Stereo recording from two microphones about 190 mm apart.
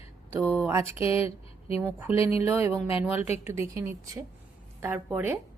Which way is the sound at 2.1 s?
30° left (ahead or behind).